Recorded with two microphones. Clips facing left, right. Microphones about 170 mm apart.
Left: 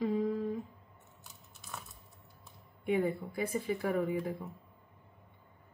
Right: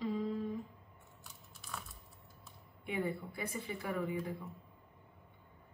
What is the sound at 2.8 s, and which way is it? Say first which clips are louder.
A woman's voice: left 7 dB; 45° left (ahead or behind).